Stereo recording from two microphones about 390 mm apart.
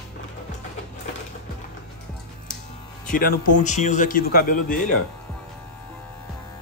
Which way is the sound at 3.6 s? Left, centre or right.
Centre.